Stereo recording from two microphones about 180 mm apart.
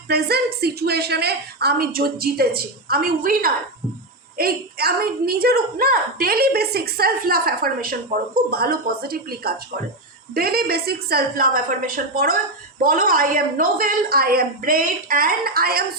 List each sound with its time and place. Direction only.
0.1 s a woman's voice: 60° right (ahead or behind)